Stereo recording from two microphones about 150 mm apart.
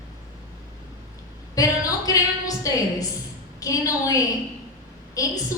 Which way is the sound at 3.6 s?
20° left (ahead or behind).